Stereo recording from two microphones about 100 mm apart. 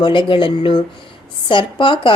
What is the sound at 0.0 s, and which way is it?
A woman's voice, 55° left (ahead or behind).